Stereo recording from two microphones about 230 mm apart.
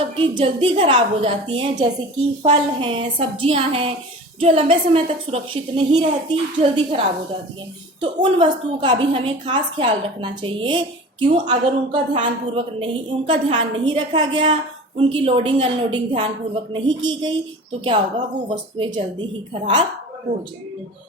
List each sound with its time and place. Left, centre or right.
0.2 s a woman's voice: right
8.2 s a woman's voice: centre